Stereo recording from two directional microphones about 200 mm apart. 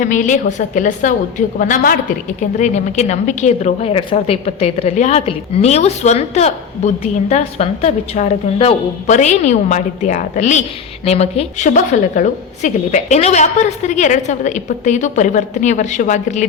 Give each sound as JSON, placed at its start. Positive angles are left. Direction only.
{"t": 0.0, "sound": "a woman's voice", "side_deg": 40}